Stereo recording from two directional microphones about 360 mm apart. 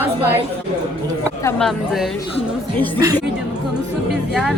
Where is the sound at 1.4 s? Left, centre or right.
Centre.